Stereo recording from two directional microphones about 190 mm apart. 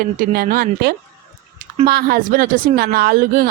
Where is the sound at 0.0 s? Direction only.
45° right (ahead or behind).